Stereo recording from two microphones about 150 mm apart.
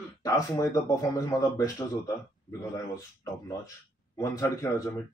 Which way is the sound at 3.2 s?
20° left (ahead or behind).